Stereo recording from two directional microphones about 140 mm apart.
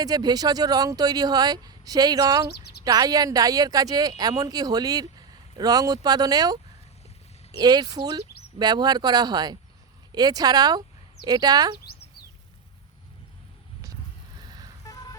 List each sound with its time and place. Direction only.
0.0 s speech: 30° right (ahead or behind)
7.6 s speech: 30° right (ahead or behind)
14.4 s vehicle: 30° right (ahead or behind)
14.8 s vehicle: 25° left (ahead or behind)